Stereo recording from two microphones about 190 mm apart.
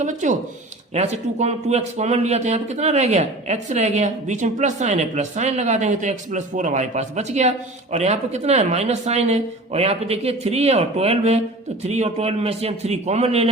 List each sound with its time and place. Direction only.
0.0 s speech: 40° right (ahead or behind)